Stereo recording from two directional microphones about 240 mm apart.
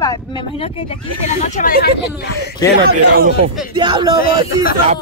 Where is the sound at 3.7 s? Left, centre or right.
Centre.